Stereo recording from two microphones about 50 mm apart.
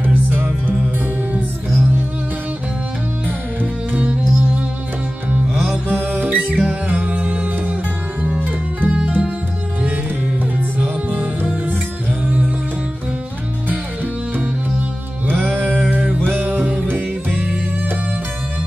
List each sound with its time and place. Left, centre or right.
0.0 s music: right
3.9 s music: right
5.5 s music: centre
5.9 s music: right
10.8 s music: right
15.3 s music: right